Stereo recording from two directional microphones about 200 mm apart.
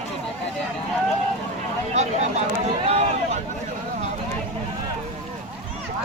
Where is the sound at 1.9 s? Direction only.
35° right (ahead or behind).